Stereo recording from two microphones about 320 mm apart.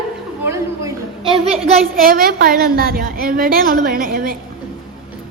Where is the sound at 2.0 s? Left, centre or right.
Right.